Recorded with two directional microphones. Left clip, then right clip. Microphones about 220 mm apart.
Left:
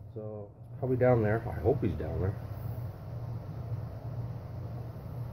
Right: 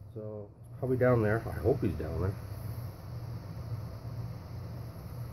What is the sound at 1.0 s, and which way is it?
Speech, 15° right (ahead or behind).